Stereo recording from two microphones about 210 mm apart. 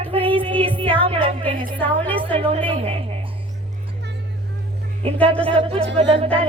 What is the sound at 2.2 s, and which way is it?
Speech, 25° right (ahead or behind).